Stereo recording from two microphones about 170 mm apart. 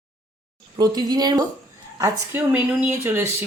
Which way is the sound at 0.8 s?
25° right (ahead or behind).